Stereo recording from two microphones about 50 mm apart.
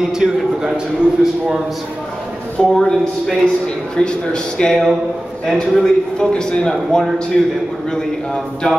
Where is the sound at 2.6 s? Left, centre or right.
Centre.